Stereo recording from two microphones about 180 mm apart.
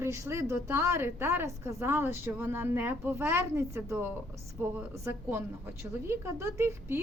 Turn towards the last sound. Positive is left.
turn(degrees=-15)  # may be behind; listen again after turning